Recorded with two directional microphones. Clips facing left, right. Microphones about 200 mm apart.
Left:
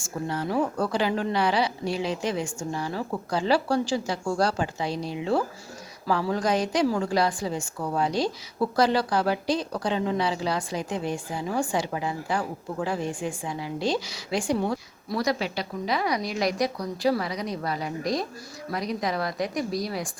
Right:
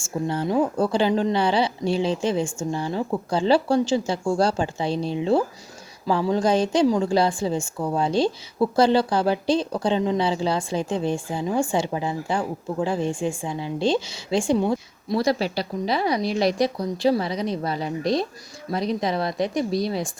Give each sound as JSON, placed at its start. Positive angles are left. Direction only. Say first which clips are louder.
{"t": 0.0, "sound": "a woman's voice", "louder": "right 4 dB", "side_deg": -25}